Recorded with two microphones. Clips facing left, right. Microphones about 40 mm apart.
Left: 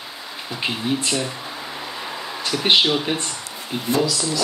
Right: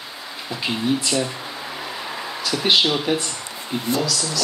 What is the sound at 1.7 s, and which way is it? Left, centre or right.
Vehicle, centre.